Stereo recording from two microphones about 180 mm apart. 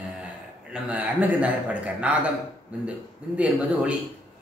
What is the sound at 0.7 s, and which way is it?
A man's voice, 10° right (ahead or behind).